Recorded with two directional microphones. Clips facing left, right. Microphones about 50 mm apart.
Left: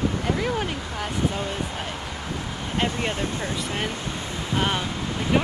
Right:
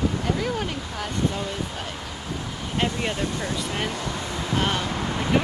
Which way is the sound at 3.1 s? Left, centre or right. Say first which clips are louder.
Even; left.